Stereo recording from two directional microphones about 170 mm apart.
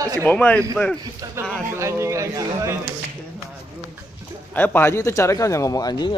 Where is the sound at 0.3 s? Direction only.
10° left (ahead or behind).